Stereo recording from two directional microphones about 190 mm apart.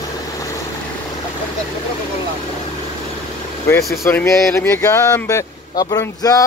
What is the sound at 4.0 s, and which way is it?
Speech, 10° left (ahead or behind).